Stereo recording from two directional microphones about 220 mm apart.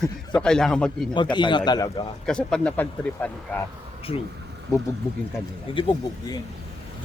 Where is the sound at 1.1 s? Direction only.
20° left (ahead or behind).